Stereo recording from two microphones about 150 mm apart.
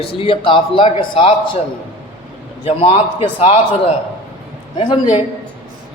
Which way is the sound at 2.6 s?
40° left (ahead or behind).